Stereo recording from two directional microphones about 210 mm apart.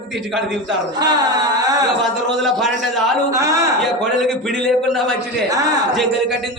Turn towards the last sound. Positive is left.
turn(degrees=-15)  # may be behind; listen again after turning